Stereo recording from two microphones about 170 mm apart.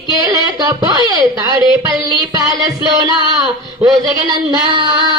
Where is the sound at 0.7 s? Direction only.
25° right (ahead or behind).